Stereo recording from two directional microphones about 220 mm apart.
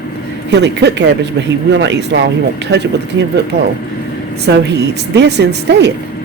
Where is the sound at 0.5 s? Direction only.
50° right (ahead or behind).